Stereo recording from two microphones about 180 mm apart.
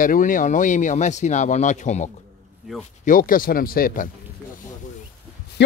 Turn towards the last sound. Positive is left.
turn(degrees=50)  # may be behind; listen again after turning